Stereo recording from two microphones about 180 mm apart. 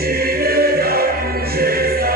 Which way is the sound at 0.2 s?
60° right (ahead or behind).